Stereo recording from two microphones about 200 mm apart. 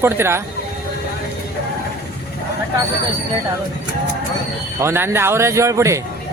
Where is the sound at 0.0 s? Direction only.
10° right (ahead or behind).